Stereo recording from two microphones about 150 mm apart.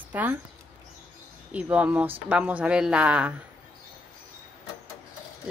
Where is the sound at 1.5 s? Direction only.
10° right (ahead or behind).